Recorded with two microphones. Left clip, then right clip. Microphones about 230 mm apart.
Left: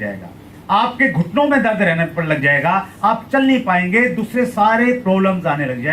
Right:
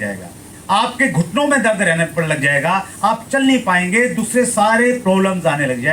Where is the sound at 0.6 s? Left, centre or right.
Right.